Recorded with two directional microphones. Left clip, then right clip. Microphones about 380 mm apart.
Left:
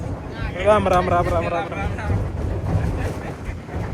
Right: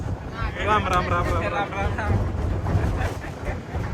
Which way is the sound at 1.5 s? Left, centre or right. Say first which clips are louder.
Even; right.